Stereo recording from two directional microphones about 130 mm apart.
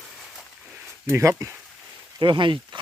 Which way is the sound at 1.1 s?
25° right (ahead or behind).